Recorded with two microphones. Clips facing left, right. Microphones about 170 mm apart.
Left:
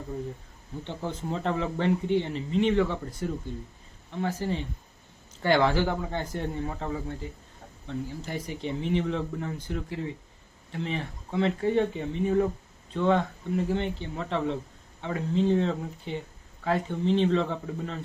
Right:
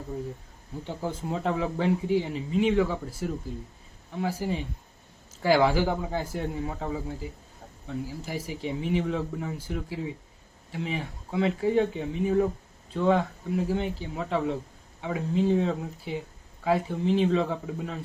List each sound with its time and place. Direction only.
0.9 s speech: 5° right (ahead or behind)